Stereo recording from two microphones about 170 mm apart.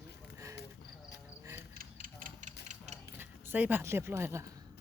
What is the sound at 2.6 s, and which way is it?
Mechanisms, 40° right (ahead or behind).